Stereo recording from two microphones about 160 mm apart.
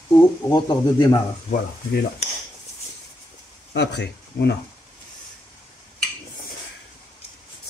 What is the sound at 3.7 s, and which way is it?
Speech, 90° left.